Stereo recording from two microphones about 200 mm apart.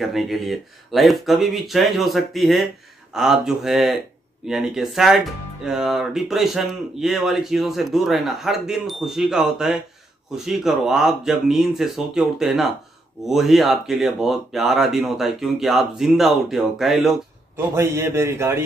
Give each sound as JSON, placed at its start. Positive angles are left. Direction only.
{"t": 0.0, "sound": "speech", "side_deg": 0}
{"t": 17.6, "sound": "a man's voice", "side_deg": -10}